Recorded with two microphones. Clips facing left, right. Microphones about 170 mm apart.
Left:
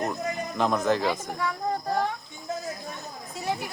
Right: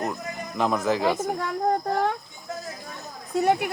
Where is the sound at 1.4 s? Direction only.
50° right (ahead or behind).